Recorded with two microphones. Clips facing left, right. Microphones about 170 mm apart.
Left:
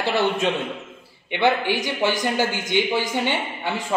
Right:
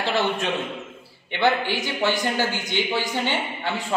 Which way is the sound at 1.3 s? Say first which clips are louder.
Left 2 dB; 20° left (ahead or behind).